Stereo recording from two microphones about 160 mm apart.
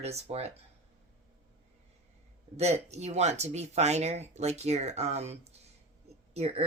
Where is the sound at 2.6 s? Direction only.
45° right (ahead or behind).